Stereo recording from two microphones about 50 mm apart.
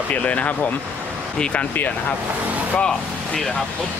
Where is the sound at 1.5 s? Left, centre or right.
Left.